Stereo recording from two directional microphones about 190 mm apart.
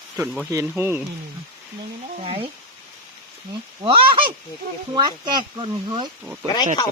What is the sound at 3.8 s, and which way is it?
Speech, 25° right (ahead or behind).